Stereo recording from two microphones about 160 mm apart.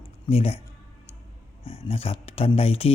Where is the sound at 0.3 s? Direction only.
40° left (ahead or behind).